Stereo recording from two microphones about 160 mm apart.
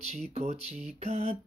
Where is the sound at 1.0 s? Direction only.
40° right (ahead or behind).